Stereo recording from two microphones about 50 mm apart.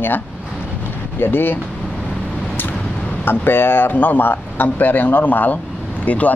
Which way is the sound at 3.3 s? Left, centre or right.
Left.